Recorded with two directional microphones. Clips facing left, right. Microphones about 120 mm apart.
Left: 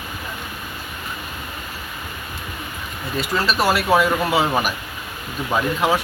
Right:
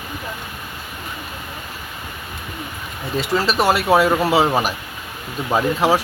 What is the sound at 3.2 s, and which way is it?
Speech, 25° right (ahead or behind).